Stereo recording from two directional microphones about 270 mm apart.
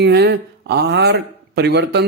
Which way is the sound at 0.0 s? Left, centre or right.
Right.